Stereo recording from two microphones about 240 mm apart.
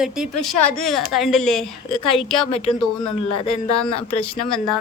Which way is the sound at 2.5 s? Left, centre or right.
Left.